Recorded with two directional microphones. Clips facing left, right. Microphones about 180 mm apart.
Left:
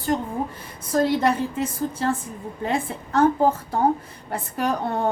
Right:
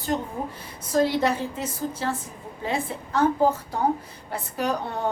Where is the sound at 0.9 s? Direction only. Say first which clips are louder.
Left 2 dB; 55° left (ahead or behind).